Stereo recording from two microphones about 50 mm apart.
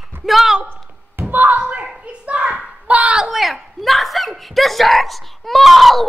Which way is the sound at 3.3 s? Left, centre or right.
Centre.